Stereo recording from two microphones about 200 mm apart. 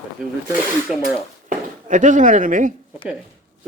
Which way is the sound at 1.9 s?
40° right (ahead or behind).